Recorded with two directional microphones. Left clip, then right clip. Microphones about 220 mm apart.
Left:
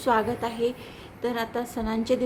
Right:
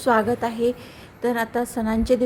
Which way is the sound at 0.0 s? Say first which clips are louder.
Right 4 dB; 20° right (ahead or behind).